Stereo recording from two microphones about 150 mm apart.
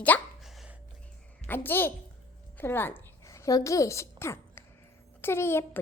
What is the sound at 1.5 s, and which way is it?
A child's voice, 15° left (ahead or behind).